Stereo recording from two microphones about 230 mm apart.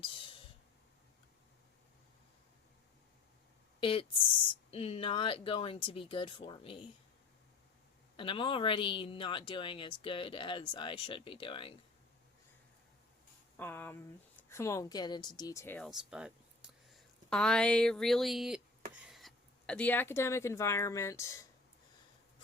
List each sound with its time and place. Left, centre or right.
0.0 s a sound: left
3.8 s speech: left
8.1 s speech: left
13.6 s speech: centre